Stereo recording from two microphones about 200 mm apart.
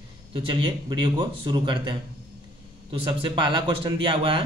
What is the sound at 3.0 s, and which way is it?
Speech, 25° right (ahead or behind).